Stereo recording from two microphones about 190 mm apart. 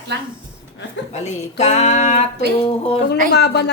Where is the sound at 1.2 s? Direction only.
35° left (ahead or behind).